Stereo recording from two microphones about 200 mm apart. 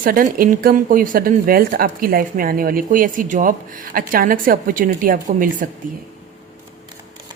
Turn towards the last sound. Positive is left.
turn(degrees=-45)  # may be behind; listen again after turning